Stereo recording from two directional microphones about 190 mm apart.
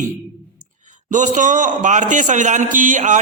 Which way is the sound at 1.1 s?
40° right (ahead or behind).